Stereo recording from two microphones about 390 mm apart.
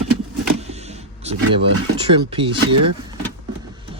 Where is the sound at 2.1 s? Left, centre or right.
Centre.